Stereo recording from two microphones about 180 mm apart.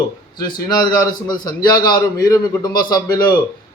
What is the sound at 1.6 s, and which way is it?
Speech, 25° left (ahead or behind).